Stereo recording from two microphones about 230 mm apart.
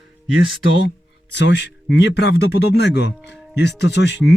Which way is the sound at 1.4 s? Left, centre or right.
Left.